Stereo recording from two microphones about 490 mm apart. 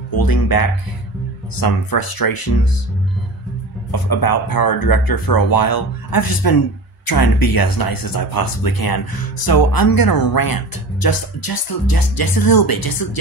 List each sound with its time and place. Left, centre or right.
0.1 s speech: left
3.9 s speech: left